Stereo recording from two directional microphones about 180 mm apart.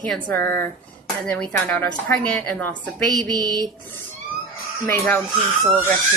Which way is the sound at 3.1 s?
20° right (ahead or behind).